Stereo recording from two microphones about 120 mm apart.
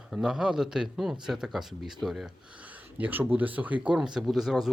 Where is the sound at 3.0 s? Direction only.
15° right (ahead or behind).